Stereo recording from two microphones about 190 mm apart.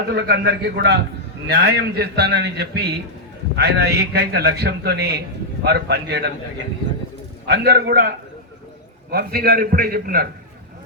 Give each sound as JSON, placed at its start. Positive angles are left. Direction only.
{"t": 0.1, "sound": "a man's voice", "side_deg": -60}
{"t": 7.4, "sound": "a man's voice", "side_deg": -60}